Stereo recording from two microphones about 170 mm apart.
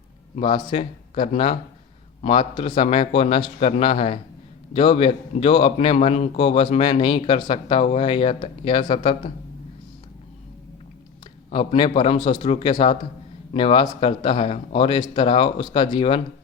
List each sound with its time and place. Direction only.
0.3 s a man's voice: 35° left (ahead or behind)
11.5 s a man's voice: 35° left (ahead or behind)